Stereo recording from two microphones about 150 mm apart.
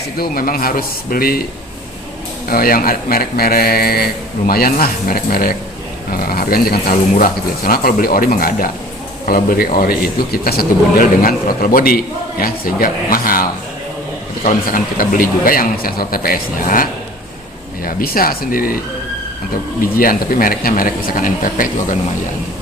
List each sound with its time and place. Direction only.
0.2 s speech: 75° left (ahead or behind)
2.5 s speech: 75° left (ahead or behind)
14.4 s speech: 65° left (ahead or behind)
19.8 s speech: 70° left (ahead or behind)